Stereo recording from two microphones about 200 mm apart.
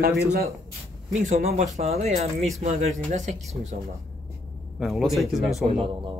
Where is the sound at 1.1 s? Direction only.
35° right (ahead or behind).